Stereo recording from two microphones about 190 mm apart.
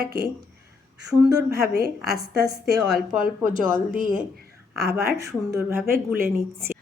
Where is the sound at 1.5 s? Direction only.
55° right (ahead or behind).